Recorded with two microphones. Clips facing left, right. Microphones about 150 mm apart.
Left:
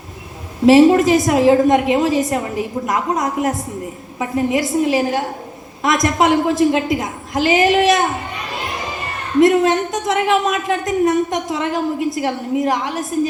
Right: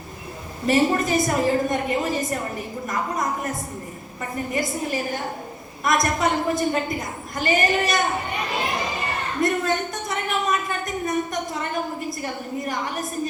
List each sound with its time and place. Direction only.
0.6 s a woman's voice: 90° left
9.4 s a woman's voice: 90° left